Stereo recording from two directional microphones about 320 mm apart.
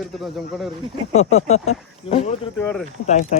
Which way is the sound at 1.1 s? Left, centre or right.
Centre.